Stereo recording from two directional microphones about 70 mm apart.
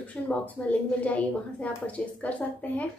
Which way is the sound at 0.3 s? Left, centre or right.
Left.